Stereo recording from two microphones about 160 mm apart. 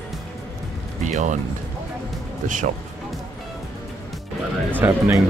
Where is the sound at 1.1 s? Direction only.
50° right (ahead or behind).